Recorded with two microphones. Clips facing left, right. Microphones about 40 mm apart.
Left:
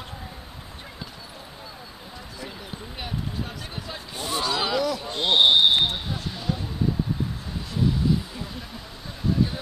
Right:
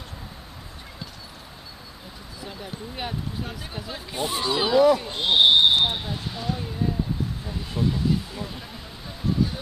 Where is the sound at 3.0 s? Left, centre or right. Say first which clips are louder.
Even; centre.